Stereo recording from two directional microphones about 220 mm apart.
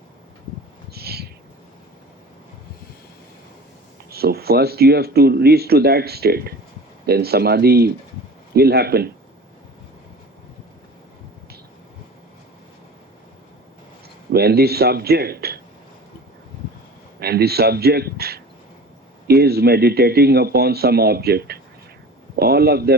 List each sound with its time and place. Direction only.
0.9 s owl: 45° right (ahead or behind)
4.1 s speech: 45° right (ahead or behind)
14.3 s speech: 45° right (ahead or behind)
17.2 s speech: 45° right (ahead or behind)